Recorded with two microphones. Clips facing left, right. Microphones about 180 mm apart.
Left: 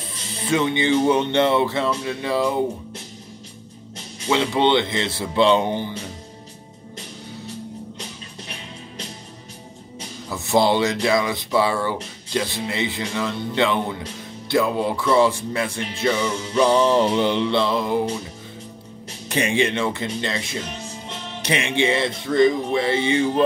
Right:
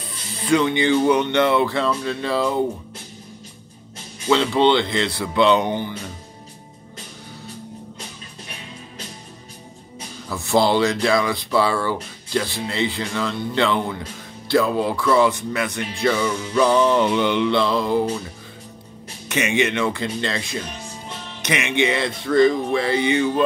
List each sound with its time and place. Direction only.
0.5 s speech: 25° left (ahead or behind)
4.3 s speech: 20° left (ahead or behind)
10.3 s speech: 20° left (ahead or behind)
19.2 s speech: 35° left (ahead or behind)
21.4 s speech: 30° left (ahead or behind)